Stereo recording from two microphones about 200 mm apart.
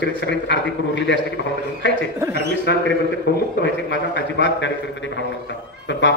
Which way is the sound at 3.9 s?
65° left (ahead or behind).